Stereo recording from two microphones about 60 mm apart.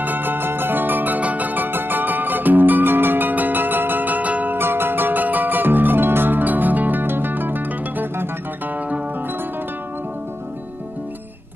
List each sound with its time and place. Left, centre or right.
0.0 s music: right
4.6 s music: right